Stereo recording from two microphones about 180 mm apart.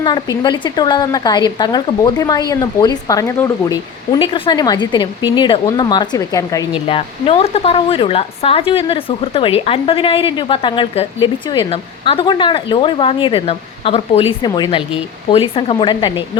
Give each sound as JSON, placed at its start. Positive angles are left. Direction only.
{"t": 0.0, "sound": "speech", "side_deg": 25}
{"t": 4.2, "sound": "speech", "side_deg": 30}
{"t": 6.7, "sound": "speech", "side_deg": 30}